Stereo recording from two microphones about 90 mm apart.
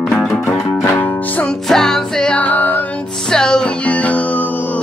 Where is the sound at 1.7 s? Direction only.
5° left (ahead or behind).